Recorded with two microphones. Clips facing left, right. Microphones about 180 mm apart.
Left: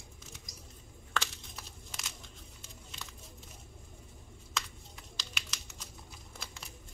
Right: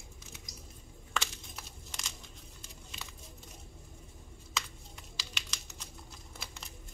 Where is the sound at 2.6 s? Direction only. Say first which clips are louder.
Right 1 dB; 5° right (ahead or behind).